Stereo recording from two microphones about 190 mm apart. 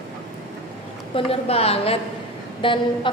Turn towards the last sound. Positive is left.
turn(degrees=25)  # may be behind; listen again after turning